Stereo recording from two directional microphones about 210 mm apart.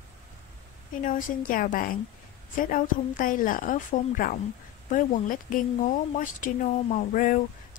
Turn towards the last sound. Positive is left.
turn(degrees=40)  # may be behind; listen again after turning